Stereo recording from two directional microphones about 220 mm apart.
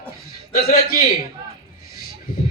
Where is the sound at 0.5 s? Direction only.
40° left (ahead or behind).